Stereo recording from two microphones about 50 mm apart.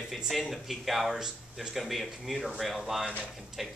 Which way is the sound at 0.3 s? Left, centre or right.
Centre.